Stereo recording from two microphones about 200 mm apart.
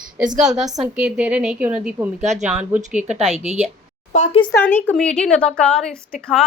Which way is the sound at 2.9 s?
35° right (ahead or behind).